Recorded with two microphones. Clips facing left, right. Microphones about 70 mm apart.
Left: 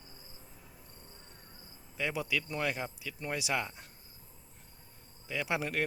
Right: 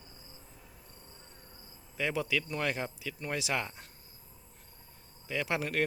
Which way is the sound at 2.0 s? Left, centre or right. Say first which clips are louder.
Right 2 dB; centre.